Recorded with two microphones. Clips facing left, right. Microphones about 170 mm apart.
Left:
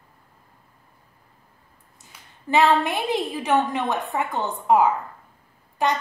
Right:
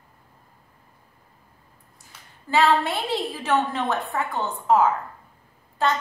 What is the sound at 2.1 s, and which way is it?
A woman's voice, 20° left (ahead or behind).